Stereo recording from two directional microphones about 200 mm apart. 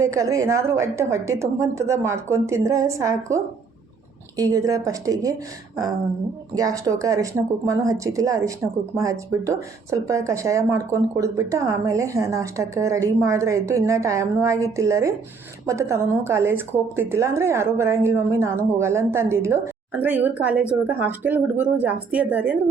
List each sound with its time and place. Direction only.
0.0 s speech: 15° right (ahead or behind)
6.6 s speech: 20° right (ahead or behind)